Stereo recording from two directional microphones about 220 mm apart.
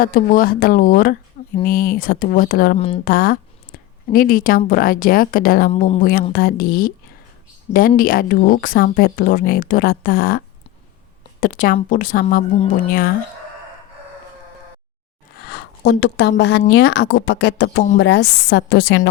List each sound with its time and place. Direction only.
0.0 s speech: 40° left (ahead or behind)
2.7 s speech: 25° left (ahead or behind)
3.0 s speech: 40° left (ahead or behind)
5.7 s speech: 25° left (ahead or behind)
6.0 s speech: 40° left (ahead or behind)
15.4 s a sound: 45° left (ahead or behind)
16.4 s speech: 50° left (ahead or behind)